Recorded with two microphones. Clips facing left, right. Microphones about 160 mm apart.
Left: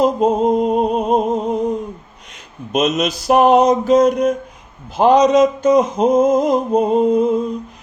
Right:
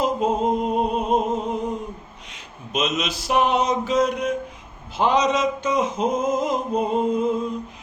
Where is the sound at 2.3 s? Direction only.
45° left (ahead or behind).